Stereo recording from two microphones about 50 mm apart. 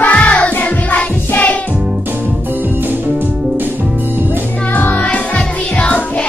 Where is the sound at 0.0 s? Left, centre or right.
Left.